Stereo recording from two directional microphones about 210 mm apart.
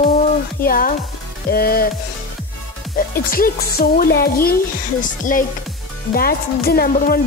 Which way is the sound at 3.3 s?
45° left (ahead or behind).